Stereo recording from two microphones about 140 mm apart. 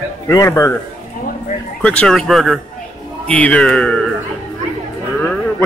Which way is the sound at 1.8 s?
5° left (ahead or behind).